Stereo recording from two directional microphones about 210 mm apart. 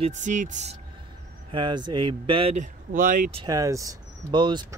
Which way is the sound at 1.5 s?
20° right (ahead or behind).